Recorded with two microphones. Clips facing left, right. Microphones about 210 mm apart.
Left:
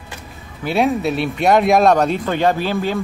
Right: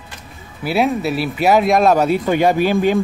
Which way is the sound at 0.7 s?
5° right (ahead or behind).